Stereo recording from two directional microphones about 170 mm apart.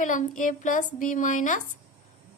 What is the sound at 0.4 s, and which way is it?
A woman's voice, 50° left (ahead or behind).